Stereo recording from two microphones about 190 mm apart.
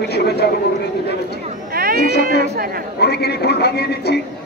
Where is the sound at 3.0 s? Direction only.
60° left (ahead or behind).